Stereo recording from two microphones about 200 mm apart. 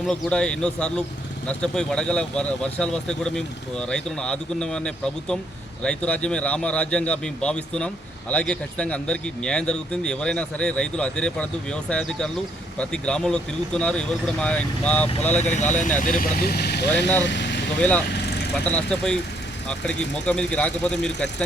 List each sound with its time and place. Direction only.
0.1 s speech: 5° left (ahead or behind)
15.4 s speech: 35° left (ahead or behind); by 17.6 s 60° left (ahead or behind)
17.7 s speech: 10° left (ahead or behind)